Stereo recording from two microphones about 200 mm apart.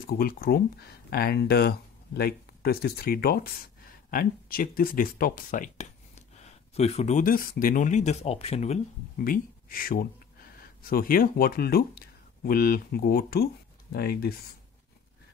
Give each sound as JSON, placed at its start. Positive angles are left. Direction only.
{"t": 0.0, "sound": "speech", "side_deg": 45}
{"t": 9.2, "sound": "speech", "side_deg": 45}